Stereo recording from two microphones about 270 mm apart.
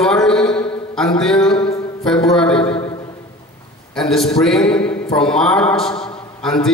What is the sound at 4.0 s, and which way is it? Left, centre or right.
A man's voice, centre.